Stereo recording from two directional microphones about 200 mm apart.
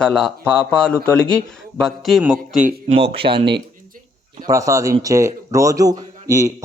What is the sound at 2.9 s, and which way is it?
Speech, 30° right (ahead or behind).